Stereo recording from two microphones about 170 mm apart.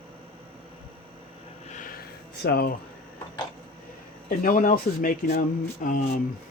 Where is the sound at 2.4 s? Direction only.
65° left (ahead or behind).